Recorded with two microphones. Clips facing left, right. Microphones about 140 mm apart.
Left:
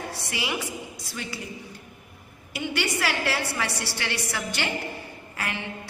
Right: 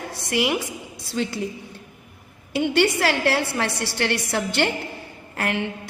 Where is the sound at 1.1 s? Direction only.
75° right (ahead or behind).